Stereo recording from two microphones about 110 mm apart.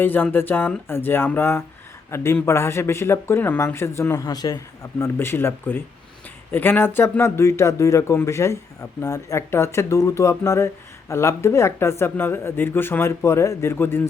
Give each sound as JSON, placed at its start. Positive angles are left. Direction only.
{"t": 0.0, "sound": "speech", "side_deg": 15}
{"t": 4.3, "sound": "a man's voice", "side_deg": 35}
{"t": 4.9, "sound": "speech", "side_deg": 20}